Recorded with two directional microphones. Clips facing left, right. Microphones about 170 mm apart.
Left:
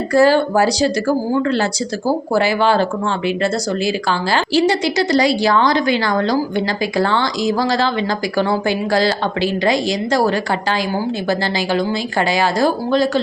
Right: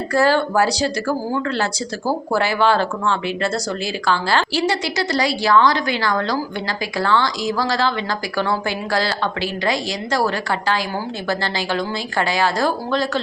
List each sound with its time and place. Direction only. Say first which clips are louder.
0.1 s a woman's voice: left 4 dB; 15° left (ahead or behind)